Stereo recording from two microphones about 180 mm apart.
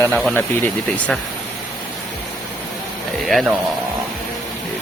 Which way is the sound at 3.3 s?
Centre (ahead or behind).